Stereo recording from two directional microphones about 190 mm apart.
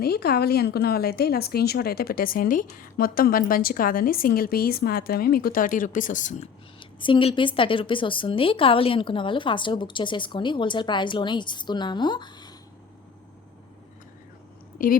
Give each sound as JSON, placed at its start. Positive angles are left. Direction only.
{"t": 0.0, "sound": "a woman's voice", "side_deg": 55}
{"t": 7.0, "sound": "a woman's voice", "side_deg": 25}
{"t": 14.8, "sound": "a woman's voice", "side_deg": 45}